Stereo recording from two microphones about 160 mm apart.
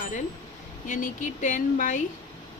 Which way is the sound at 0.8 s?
55° left (ahead or behind).